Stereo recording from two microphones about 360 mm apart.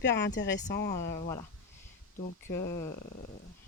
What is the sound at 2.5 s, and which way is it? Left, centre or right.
Speech, centre.